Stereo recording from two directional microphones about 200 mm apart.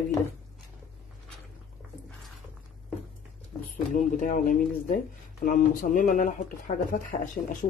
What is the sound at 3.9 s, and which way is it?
Speech, 40° left (ahead or behind).